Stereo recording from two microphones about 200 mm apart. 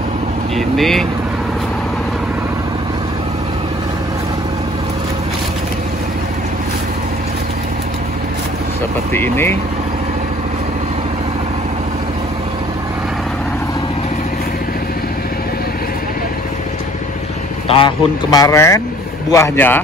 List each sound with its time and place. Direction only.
0.6 s speech: centre (ahead or behind)
9.1 s speech: 10° left (ahead or behind)
17.6 s speech: 25° left (ahead or behind)